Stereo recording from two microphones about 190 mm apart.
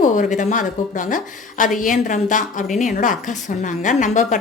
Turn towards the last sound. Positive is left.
turn(degrees=40)  # may be behind; listen again after turning